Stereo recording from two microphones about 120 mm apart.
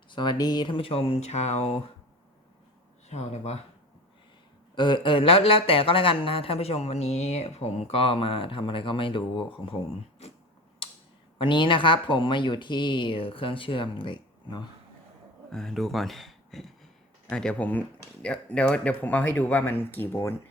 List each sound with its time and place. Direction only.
0.1 s speech: 40° left (ahead or behind); by 1.7 s 65° left (ahead or behind)
3.1 s speech: 65° left (ahead or behind)
4.7 s speech: 40° left (ahead or behind)
11.3 s speech: 40° left (ahead or behind)
15.5 s speech: 5° left (ahead or behind)